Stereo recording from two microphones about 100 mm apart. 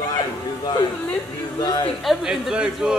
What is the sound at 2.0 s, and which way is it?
Speech, 5° right (ahead or behind).